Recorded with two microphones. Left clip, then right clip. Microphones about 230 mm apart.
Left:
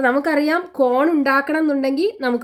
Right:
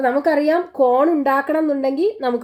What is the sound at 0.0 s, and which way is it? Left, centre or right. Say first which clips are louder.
A woman's voice: right 1 dB; left.